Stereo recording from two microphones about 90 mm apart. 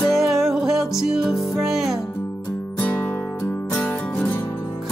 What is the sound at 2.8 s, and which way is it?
Music, 20° left (ahead or behind).